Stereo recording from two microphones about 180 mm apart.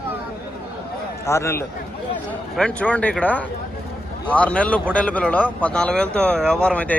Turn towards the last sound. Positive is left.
turn(degrees=5)  # may be behind; listen again after turning